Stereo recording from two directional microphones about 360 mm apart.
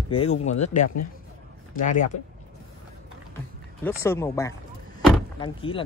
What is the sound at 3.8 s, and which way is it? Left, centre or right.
Speech, centre.